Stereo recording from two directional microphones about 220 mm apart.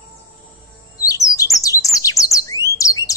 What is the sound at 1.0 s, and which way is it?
Chirp, 15° left (ahead or behind).